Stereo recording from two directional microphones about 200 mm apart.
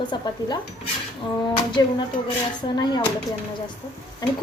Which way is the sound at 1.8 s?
20° left (ahead or behind).